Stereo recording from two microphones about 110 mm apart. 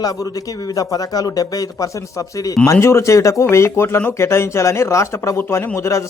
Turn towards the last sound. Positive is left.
turn(degrees=25)  # may be behind; listen again after turning